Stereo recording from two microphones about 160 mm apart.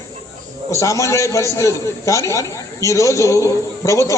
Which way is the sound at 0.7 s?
20° left (ahead or behind).